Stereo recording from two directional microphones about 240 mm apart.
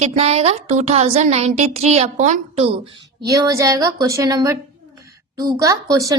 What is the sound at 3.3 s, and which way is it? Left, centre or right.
A woman's voice, centre.